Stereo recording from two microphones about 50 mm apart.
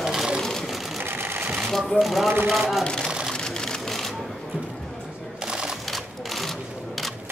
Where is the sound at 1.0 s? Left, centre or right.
Right.